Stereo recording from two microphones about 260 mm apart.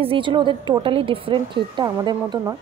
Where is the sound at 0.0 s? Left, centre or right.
Centre.